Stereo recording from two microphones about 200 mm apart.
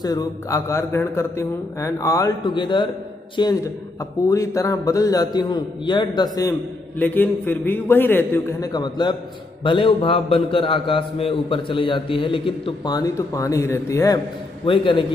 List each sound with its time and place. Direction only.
0.0 s a man's voice: 20° left (ahead or behind)
7.0 s a man's voice: 10° left (ahead or behind)
14.7 s a man's voice: 25° left (ahead or behind)